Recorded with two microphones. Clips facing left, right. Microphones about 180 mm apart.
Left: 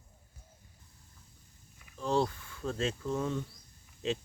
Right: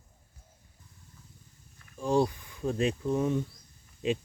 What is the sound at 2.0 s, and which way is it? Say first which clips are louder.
Speech: right 4 dB; 15° right (ahead or behind).